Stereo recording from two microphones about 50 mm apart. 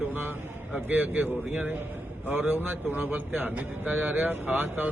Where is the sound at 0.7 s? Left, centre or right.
Right.